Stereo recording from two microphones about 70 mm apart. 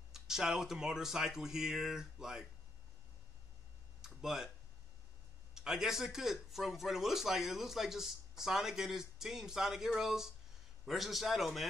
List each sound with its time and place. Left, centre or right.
0.1 s speech: centre
4.0 s a sound: centre
5.5 s speech: centre